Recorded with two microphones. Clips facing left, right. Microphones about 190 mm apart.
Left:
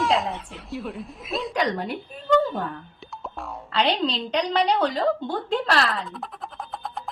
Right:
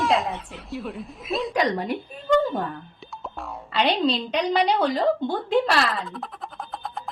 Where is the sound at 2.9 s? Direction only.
Centre (ahead or behind).